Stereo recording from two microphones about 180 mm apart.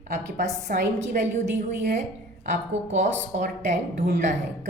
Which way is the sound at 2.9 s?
40° right (ahead or behind).